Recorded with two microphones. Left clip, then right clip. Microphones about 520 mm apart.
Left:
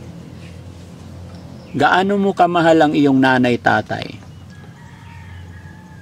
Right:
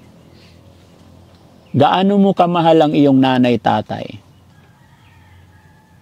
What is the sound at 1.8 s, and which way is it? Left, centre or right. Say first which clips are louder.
A man's voice: right 1 dB; right.